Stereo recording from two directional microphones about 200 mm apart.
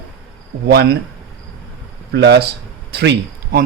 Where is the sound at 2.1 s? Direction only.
60° right (ahead or behind).